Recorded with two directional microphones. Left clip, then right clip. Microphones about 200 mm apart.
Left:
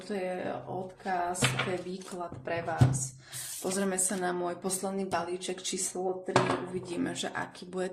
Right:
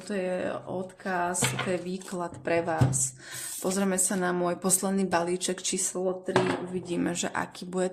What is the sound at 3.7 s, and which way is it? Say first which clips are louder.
Speech: right 3 dB; 30° right (ahead or behind).